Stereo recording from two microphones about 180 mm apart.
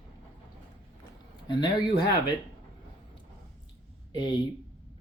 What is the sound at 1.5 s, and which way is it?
Speech, 25° left (ahead or behind).